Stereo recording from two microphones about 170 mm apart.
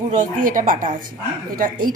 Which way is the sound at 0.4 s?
55° right (ahead or behind).